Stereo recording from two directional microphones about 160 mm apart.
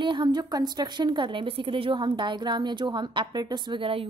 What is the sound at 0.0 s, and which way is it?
A woman's voice, 30° right (ahead or behind).